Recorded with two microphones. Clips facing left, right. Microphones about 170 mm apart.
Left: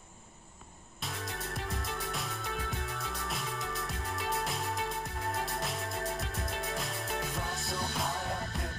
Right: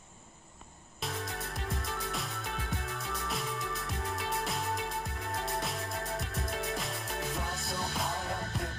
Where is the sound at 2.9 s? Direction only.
Centre (ahead or behind).